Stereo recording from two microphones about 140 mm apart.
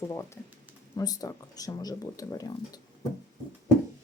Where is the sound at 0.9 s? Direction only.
25° left (ahead or behind).